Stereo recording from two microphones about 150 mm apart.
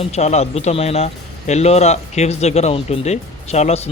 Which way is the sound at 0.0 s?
45° left (ahead or behind).